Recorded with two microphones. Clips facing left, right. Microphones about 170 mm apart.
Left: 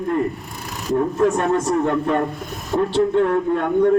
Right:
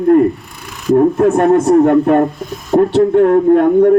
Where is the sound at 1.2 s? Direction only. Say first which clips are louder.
Right 8 dB; 50° right (ahead or behind).